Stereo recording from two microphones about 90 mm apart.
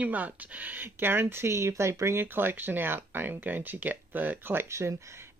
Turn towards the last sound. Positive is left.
turn(degrees=-30)  # may be behind; listen again after turning